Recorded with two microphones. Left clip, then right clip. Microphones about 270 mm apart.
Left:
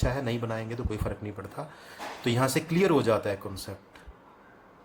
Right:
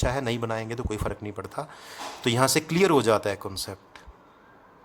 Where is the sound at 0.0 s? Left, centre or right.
Right.